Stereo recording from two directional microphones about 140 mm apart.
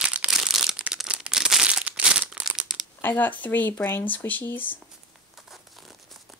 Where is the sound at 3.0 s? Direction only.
15° left (ahead or behind).